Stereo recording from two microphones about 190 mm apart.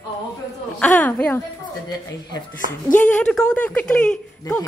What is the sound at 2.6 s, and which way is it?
Speech, 45° left (ahead or behind).